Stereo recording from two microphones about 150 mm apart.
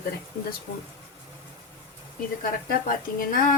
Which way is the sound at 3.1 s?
65° left (ahead or behind).